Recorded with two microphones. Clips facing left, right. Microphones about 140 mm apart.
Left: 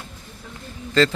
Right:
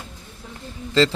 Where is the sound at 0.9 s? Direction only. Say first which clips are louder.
Even; 20° right (ahead or behind).